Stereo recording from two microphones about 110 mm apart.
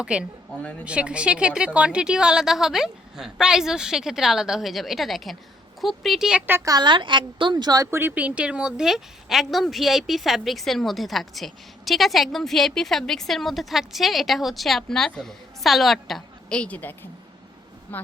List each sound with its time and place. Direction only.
0.0 s a woman's voice: 10° right (ahead or behind)
6.7 s a woman's voice: 40° right (ahead or behind)
7.9 s a woman's voice: 20° right (ahead or behind); by 18.0 s 20° left (ahead or behind)